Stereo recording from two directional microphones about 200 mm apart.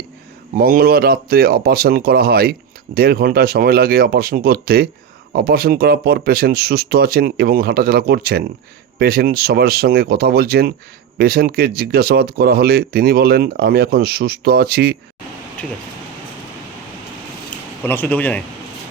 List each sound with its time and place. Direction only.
0.5 s speech: 45° right (ahead or behind)
15.6 s speech: 5° left (ahead or behind)
17.8 s speech: 10° left (ahead or behind)